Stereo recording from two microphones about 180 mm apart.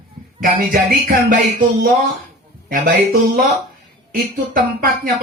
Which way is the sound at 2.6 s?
50° right (ahead or behind).